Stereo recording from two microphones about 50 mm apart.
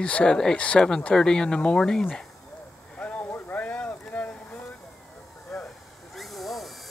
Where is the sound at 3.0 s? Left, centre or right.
Left.